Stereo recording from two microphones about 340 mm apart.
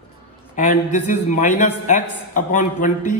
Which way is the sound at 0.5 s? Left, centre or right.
Left.